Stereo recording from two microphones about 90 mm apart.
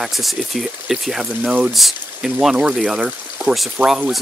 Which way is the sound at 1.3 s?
15° right (ahead or behind).